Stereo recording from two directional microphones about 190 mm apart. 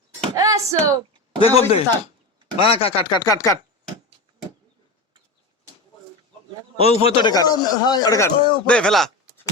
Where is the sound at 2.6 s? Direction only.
30° left (ahead or behind).